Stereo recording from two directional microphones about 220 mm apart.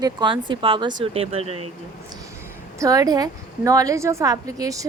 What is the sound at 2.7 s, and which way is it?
A woman's voice, 15° right (ahead or behind).